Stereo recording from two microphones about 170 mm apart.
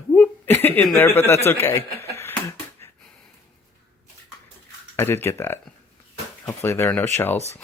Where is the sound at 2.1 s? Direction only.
15° left (ahead or behind).